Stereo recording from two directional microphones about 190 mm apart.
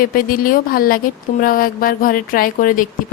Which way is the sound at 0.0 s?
50° left (ahead or behind).